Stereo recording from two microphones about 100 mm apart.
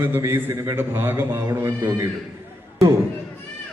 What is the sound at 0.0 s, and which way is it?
A man's voice, 25° right (ahead or behind).